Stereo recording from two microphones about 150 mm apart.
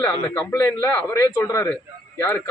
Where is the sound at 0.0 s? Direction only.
15° left (ahead or behind).